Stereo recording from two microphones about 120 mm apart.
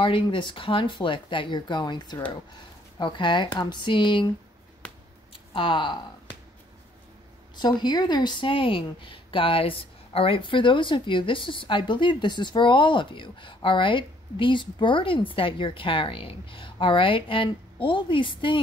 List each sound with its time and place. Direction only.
0.0 s speech: 45° left (ahead or behind)
5.5 s speech: 45° left (ahead or behind)
7.5 s speech: 35° left (ahead or behind)